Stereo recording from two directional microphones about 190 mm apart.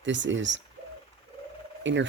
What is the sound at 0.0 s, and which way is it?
Speech, 75° right (ahead or behind).